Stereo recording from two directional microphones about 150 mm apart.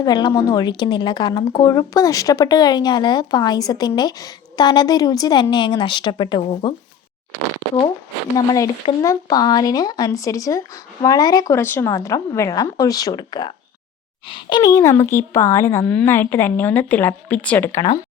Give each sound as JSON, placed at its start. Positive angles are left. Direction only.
{"t": 0.0, "sound": "a woman's voice", "side_deg": 25}
{"t": 8.4, "sound": "a woman's voice", "side_deg": 20}